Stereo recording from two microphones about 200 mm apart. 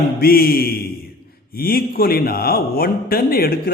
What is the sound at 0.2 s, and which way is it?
A man's voice, 50° left (ahead or behind).